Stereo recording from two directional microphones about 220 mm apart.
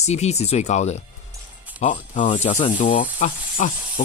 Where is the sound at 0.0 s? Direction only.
30° left (ahead or behind).